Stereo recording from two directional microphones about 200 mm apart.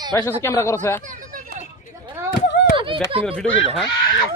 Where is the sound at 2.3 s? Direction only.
65° left (ahead or behind).